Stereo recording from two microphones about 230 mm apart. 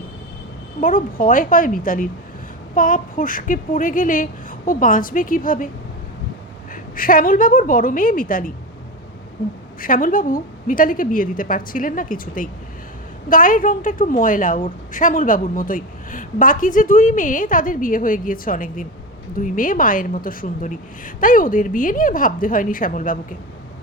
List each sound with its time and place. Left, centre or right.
0.8 s a woman's voice: left
6.9 s a woman's voice: left
9.8 s a woman's voice: left